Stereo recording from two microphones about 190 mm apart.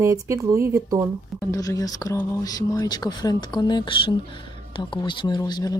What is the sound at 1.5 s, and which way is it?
Speech, 20° left (ahead or behind).